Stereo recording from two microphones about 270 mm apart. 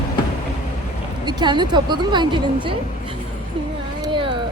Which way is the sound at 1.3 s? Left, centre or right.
Centre.